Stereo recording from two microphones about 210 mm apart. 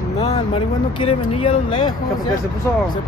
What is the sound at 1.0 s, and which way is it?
Speech, 25° left (ahead or behind).